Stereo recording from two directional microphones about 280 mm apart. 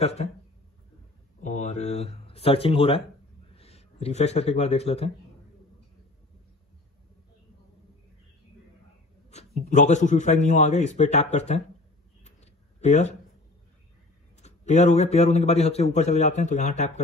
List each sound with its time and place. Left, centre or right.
0.0 s a man's voice: left
1.4 s a man's voice: left
9.3 s a man's voice: left
12.8 s a man's voice: left
14.4 s a man's voice: left